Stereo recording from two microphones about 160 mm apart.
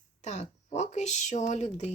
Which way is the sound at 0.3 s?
45° left (ahead or behind).